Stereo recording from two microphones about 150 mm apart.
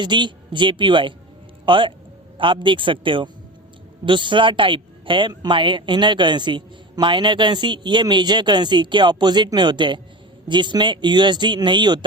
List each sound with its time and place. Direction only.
0.0 s speech: 30° right (ahead or behind)